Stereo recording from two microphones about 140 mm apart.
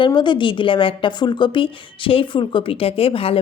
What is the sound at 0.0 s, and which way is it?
A woman's voice, 35° left (ahead or behind).